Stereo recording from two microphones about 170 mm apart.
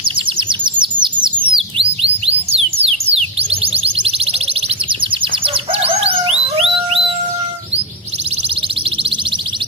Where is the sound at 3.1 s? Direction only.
35° right (ahead or behind).